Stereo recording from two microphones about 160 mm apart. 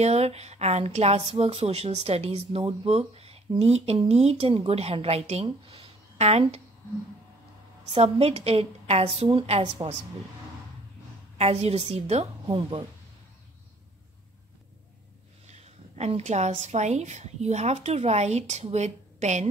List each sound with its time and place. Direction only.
0.0 s speech: 40° right (ahead or behind)
7.9 s speech: 40° right (ahead or behind)
11.3 s a woman's voice: 40° right (ahead or behind)
15.4 s a woman's voice: 45° right (ahead or behind)